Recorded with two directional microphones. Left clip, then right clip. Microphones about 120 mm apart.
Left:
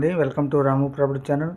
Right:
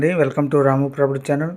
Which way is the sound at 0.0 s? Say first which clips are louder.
Right 4 dB; 55° right (ahead or behind).